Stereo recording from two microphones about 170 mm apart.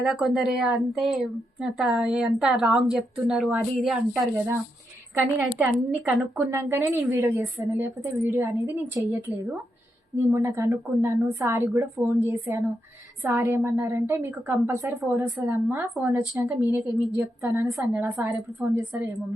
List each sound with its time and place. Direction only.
0.0 s a woman's voice: centre (ahead or behind)
5.4 s a woman's voice: 5° right (ahead or behind)
10.2 s a woman's voice: 15° right (ahead or behind)